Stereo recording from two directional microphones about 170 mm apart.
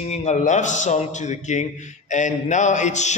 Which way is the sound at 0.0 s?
40° left (ahead or behind).